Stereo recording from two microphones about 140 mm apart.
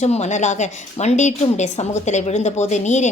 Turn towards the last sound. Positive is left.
turn(degrees=55)  # may be behind; listen again after turning